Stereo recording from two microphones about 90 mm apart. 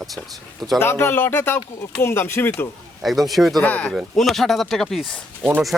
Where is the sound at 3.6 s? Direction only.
15° left (ahead or behind).